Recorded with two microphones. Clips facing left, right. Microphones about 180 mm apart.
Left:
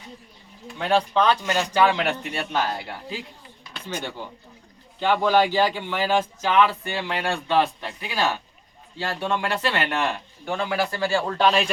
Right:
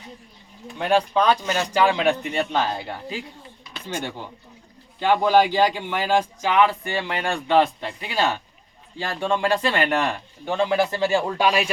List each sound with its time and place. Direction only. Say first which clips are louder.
0.8 s speech: right 1 dB; 15° right (ahead or behind)
5.0 s speech: right 2 dB; 15° right (ahead or behind)